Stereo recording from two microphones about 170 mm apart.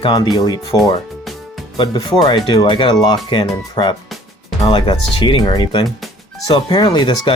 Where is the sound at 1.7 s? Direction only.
30° left (ahead or behind).